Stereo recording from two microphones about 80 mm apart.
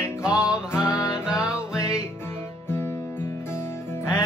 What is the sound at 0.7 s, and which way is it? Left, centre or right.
Music, left.